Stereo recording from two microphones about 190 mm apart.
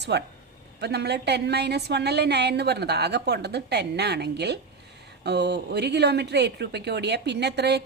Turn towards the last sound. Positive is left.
turn(degrees=-60)  # may be behind; listen again after turning